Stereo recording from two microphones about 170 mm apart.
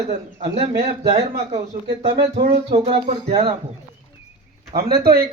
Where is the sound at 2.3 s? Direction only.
40° right (ahead or behind).